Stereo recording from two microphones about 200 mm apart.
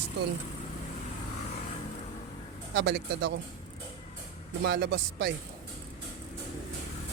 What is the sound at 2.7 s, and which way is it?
Speech, 55° right (ahead or behind).